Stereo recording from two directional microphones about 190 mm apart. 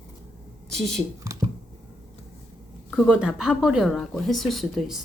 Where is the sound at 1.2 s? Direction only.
15° right (ahead or behind).